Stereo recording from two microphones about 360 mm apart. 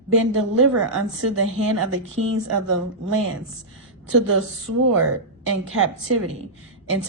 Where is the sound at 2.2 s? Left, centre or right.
Right.